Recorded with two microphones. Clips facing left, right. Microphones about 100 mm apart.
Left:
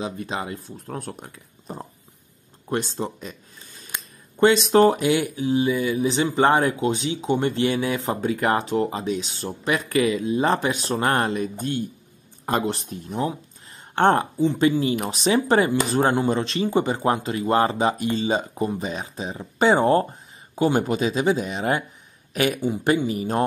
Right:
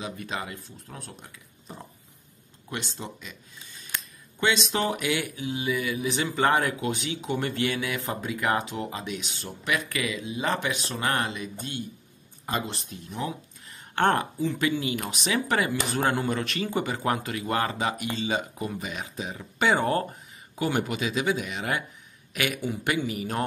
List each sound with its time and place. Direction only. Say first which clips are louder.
0.0 s speech: left 5 dB; 30° left (ahead or behind)
0.8 s speech: left 12 dB; 50° left (ahead or behind); by 23.4 s 30° left (ahead or behind)